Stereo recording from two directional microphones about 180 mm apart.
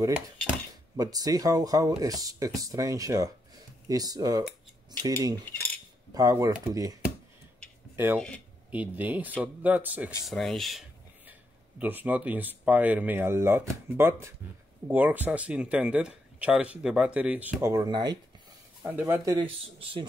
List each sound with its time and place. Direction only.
0.9 s speech: 20° right (ahead or behind)
5.4 s cutlery: 10° left (ahead or behind)
6.1 s speech: 20° right (ahead or behind)
7.9 s a sound: 10° right (ahead or behind)
8.7 s speech: 10° right (ahead or behind); by 20.1 s 25° right (ahead or behind)